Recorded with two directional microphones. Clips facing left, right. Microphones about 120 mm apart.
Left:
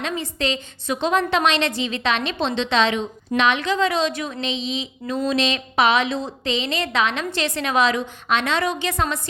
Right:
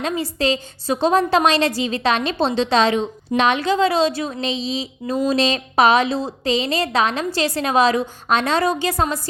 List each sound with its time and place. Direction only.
0.0 s a woman's voice: 35° right (ahead or behind)